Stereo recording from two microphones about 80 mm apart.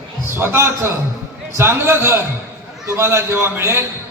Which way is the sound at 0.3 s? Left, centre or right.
Right.